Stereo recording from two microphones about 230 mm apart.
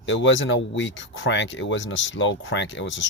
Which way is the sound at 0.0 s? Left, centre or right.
Left.